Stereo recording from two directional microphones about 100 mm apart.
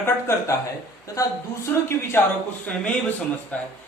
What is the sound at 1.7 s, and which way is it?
Speech, 15° left (ahead or behind).